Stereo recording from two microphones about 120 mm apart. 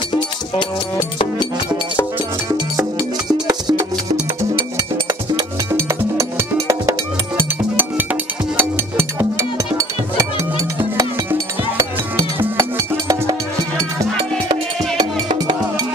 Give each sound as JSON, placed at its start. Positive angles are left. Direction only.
{"t": 1.1, "sound": "music", "side_deg": 45}
{"t": 3.4, "sound": "music", "side_deg": -35}
{"t": 5.3, "sound": "music", "side_deg": -35}
{"t": 5.9, "sound": "music", "side_deg": -25}
{"t": 11.3, "sound": "music", "side_deg": -25}
{"t": 15.0, "sound": "music", "side_deg": -40}